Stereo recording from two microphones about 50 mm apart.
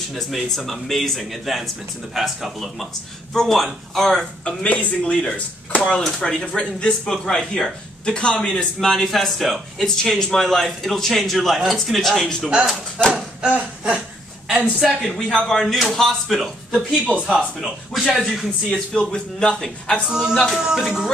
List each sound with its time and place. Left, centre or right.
0.1 s a man's voice: centre
4.6 s a man's voice: left
14.6 s a man's voice: centre
16.7 s speech: right
17.6 s a man's voice: centre
18.2 s speech: centre
20.1 s speech: centre